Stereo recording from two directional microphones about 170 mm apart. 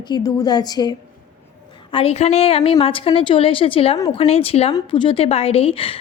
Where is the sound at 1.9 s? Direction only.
35° left (ahead or behind).